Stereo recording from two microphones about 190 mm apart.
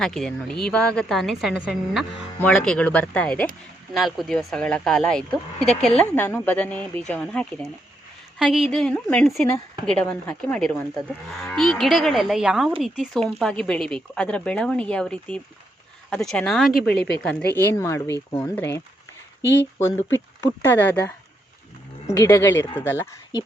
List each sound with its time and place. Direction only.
0.0 s a woman's voice: centre (ahead or behind)
19.4 s speech: 70° left (ahead or behind)
20.1 s speech: 10° left (ahead or behind)
22.1 s speech: 15° left (ahead or behind)